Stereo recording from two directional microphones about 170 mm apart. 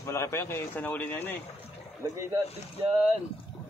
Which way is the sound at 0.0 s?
15° left (ahead or behind).